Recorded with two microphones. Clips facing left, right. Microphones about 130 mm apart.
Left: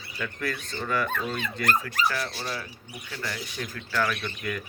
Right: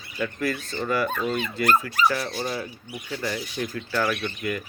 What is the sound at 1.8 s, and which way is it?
Speech, 25° right (ahead or behind).